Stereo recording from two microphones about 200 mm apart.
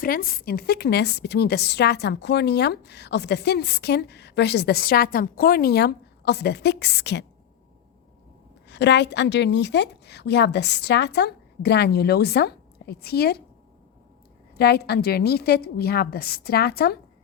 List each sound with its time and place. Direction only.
0.0 s a woman's voice: 45° left (ahead or behind)
8.7 s a woman's voice: 60° left (ahead or behind)
14.6 s a woman's voice: 55° left (ahead or behind)